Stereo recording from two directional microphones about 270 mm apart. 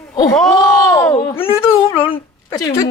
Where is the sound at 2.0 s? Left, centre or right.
Centre.